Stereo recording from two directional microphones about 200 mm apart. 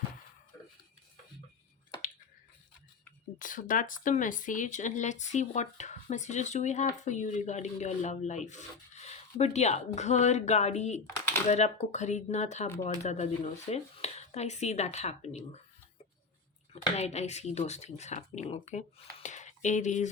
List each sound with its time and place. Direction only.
3.3 s speech: 40° left (ahead or behind)
16.7 s speech: 35° left (ahead or behind)